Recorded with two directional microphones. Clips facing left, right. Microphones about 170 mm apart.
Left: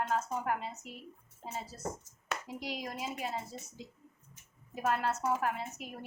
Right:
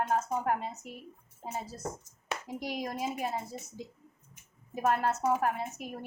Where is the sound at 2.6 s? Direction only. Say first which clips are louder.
Right 7 dB; 45° right (ahead or behind).